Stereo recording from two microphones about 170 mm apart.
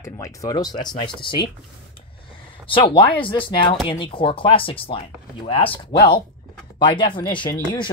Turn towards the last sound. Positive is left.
turn(degrees=25)  # may be behind; listen again after turning